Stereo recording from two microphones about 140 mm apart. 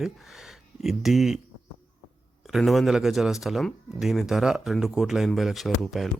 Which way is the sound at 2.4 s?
Centre (ahead or behind).